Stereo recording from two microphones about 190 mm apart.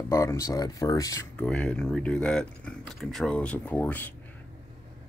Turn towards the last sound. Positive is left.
turn(degrees=10)  # may be behind; listen again after turning